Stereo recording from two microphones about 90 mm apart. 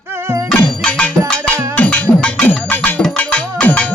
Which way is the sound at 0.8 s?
15° left (ahead or behind).